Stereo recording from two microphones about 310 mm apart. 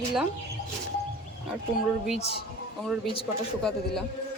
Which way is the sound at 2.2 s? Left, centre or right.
Left.